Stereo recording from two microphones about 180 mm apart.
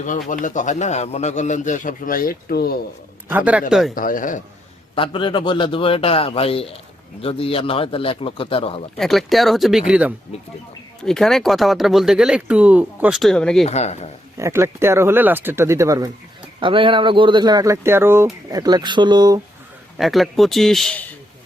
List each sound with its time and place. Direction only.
0.0 s a man's voice: 45° left (ahead or behind)
3.2 s speech: 10° right (ahead or behind)
3.9 s a man's voice: 50° left (ahead or behind)
4.9 s speech: 30° left (ahead or behind)
9.0 s speech: centre (ahead or behind)
13.7 s speech: 35° left (ahead or behind)
14.3 s speech: 15° right (ahead or behind)
16.6 s speech: 30° right (ahead or behind)
20.0 s speech: centre (ahead or behind)